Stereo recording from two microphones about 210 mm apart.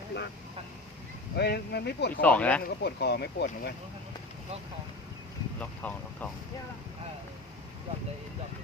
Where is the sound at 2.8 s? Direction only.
50° left (ahead or behind).